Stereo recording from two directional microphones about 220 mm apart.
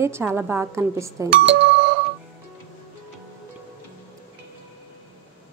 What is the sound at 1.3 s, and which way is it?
Speech, 55° right (ahead or behind).